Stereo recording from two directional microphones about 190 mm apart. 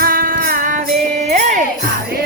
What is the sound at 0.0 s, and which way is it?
Music, 50° right (ahead or behind).